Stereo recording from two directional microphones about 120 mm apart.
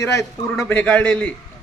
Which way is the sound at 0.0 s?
25° left (ahead or behind).